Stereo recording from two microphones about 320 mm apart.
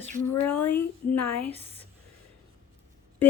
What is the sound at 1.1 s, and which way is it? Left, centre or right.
Speech, left.